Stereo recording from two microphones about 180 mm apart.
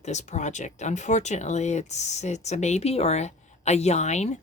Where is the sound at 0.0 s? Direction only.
40° left (ahead or behind).